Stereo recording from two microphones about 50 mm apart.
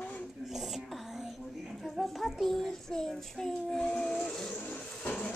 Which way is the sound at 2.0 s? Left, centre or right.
Centre.